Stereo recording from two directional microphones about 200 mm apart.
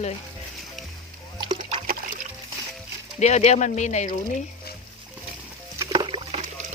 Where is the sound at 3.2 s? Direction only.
35° left (ahead or behind).